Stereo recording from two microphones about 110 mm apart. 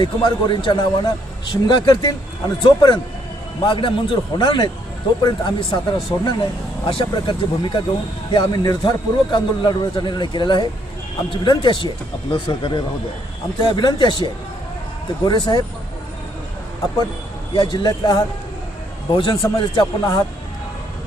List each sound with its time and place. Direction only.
0.0 s a man's voice: 45° left (ahead or behind)
6.1 s a man's voice: 35° left (ahead or behind)
6.8 s a man's voice: 45° left (ahead or behind)
17.5 s a man's voice: 45° left (ahead or behind)